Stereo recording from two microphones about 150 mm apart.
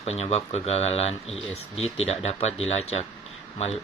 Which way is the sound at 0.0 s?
45° left (ahead or behind).